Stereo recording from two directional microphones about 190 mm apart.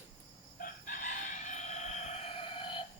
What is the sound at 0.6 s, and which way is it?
Chicken, 40° left (ahead or behind).